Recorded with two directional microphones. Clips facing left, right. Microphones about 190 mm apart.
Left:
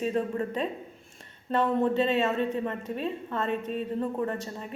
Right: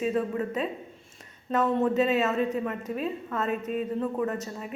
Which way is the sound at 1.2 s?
30° left (ahead or behind).